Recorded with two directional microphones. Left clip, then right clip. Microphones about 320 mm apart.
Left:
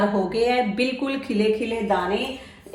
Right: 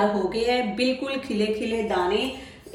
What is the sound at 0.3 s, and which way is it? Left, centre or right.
Speech, centre.